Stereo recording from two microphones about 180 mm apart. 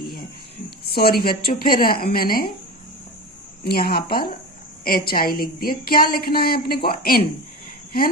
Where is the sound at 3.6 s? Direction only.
60° left (ahead or behind).